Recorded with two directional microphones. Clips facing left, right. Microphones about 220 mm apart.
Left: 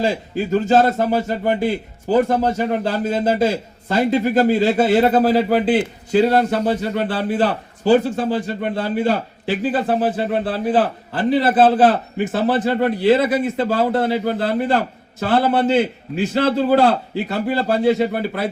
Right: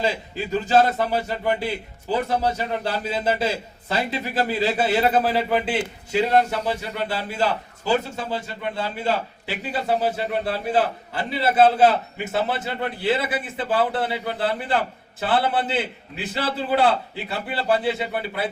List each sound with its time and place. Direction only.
0.0 s a man's voice: 45° left (ahead or behind)